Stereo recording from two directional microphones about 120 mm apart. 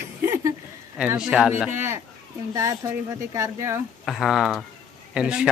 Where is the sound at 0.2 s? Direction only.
25° right (ahead or behind).